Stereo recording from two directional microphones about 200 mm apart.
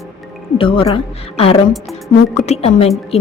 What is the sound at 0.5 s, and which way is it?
Speech, 25° left (ahead or behind).